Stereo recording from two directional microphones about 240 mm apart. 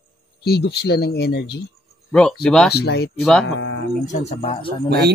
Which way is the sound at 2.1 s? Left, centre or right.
Centre.